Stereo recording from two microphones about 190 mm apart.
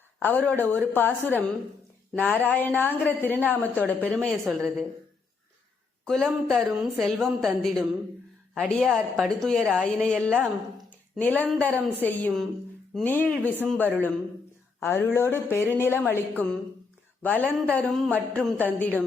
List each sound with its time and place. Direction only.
0.2 s a woman's voice: 10° left (ahead or behind)
6.1 s a woman's voice: centre (ahead or behind)
17.8 s a sound: 10° right (ahead or behind)
18.3 s a woman's voice: 5° left (ahead or behind)